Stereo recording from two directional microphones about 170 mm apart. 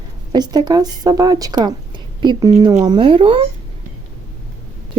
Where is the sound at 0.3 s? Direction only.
25° right (ahead or behind).